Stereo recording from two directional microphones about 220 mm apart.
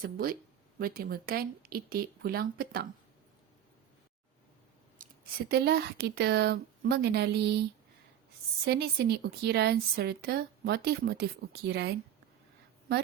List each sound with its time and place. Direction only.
0.0 s a woman's voice: 40° right (ahead or behind)
4.9 s a woman's voice: 45° right (ahead or behind)
8.6 s a woman's voice: 45° right (ahead or behind)